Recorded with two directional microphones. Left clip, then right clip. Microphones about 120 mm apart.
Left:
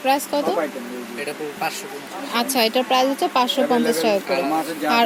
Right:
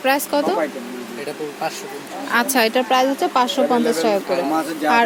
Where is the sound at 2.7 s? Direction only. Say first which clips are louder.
Right 2 dB; 15° left (ahead or behind).